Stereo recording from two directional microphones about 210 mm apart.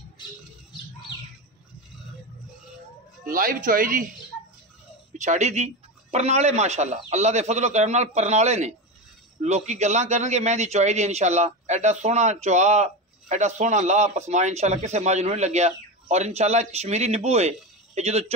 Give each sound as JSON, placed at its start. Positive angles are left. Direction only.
{"t": 3.3, "sound": "a man's voice", "side_deg": -40}
{"t": 5.1, "sound": "a man's voice", "side_deg": -35}